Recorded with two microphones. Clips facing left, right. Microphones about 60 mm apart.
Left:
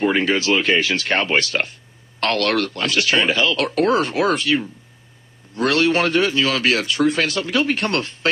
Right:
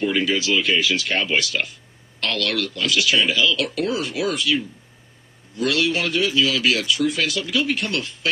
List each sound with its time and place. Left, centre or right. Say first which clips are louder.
0.0 s a man's voice: left 3 dB; left